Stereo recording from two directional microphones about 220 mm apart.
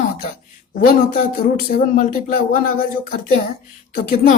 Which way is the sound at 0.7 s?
35° left (ahead or behind).